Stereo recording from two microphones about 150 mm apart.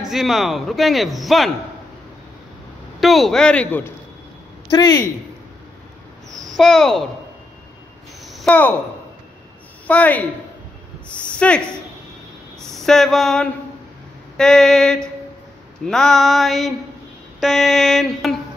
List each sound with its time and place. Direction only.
0.1 s speech: centre (ahead or behind)
3.0 s speech: centre (ahead or behind)
4.6 s speech: 25° left (ahead or behind)
6.5 s speech: 5° left (ahead or behind)
8.3 s a sound: centre (ahead or behind)
9.8 s speech: 10° left (ahead or behind)
12.5 s a sound: 5° left (ahead or behind)
14.3 s speech: 5° left (ahead or behind)